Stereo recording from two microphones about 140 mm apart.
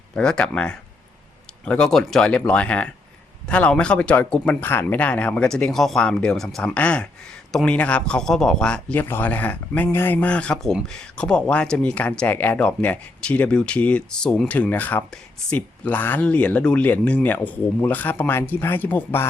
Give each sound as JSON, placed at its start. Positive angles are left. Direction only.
{"t": 0.1, "sound": "speech", "side_deg": 5}